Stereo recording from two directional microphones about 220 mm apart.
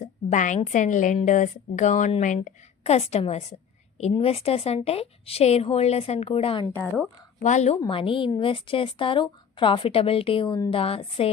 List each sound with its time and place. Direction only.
0.0 s a woman's voice: 35° left (ahead or behind)
6.7 s speech: centre (ahead or behind)
7.4 s a woman's voice: 30° left (ahead or behind)